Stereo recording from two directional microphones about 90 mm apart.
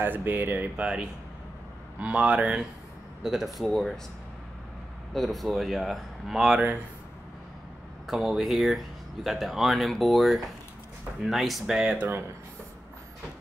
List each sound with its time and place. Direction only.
0.0 s speech: 20° right (ahead or behind); by 4.0 s centre (ahead or behind)
5.1 s speech: centre (ahead or behind)
8.1 s speech: centre (ahead or behind)